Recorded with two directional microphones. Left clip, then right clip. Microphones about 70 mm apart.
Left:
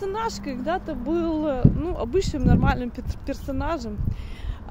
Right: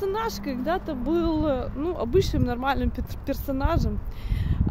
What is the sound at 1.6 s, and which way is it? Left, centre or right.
Speech, right.